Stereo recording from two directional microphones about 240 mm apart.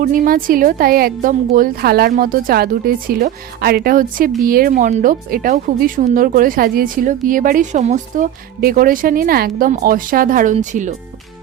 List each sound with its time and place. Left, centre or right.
0.0 s speech: right